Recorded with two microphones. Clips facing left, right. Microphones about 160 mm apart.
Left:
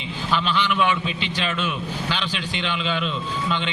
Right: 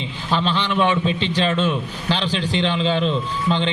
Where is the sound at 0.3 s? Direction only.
35° right (ahead or behind).